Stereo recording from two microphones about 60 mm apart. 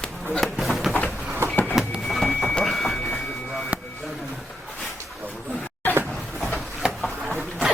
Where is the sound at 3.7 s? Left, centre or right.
Right.